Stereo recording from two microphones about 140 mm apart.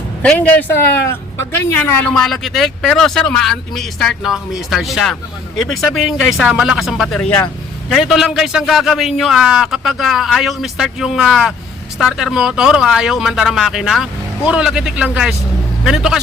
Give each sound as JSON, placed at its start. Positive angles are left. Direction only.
{"t": 0.2, "sound": "speech", "side_deg": 10}
{"t": 2.1, "sound": "a man's voice", "side_deg": 0}